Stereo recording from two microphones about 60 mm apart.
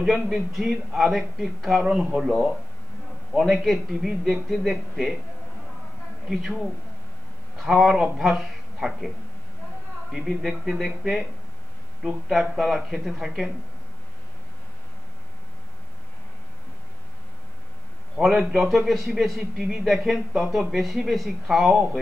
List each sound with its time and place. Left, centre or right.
0.0 s speech: centre
2.0 s speech: centre
3.3 s speech: centre
6.2 s speech: centre
10.1 s speech: centre
18.1 s a man's voice: centre